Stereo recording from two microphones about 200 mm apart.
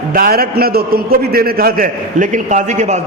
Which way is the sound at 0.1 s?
45° right (ahead or behind).